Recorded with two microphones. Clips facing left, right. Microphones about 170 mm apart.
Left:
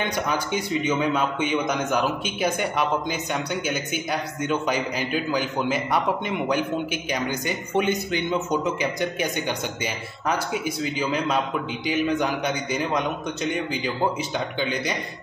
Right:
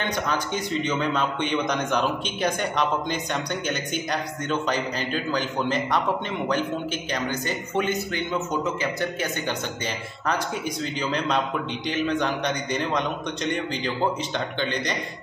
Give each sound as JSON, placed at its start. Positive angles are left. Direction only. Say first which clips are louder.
{"t": 0.3, "sound": "a man's voice", "louder": "left 1 dB", "side_deg": 10}